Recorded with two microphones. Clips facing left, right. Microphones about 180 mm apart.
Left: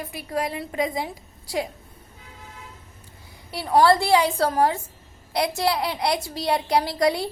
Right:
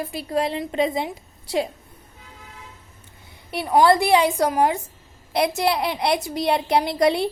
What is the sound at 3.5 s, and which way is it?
A woman's voice, 15° right (ahead or behind).